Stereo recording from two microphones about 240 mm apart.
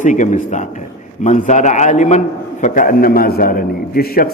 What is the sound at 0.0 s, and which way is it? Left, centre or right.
A man's voice, left.